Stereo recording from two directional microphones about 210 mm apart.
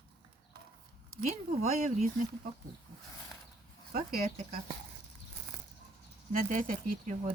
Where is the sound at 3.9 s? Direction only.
45° right (ahead or behind).